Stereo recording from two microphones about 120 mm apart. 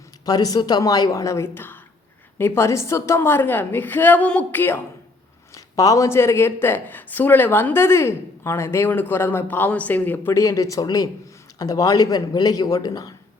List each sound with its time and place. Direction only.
0.3 s a woman's voice: 30° left (ahead or behind)
5.5 s speech: 30° left (ahead or behind)